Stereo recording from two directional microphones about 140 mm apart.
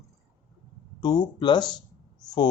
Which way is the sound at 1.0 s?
30° left (ahead or behind).